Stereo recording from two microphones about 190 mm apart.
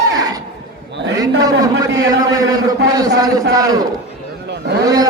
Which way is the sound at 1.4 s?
20° right (ahead or behind).